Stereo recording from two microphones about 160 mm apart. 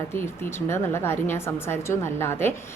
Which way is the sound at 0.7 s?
15° left (ahead or behind).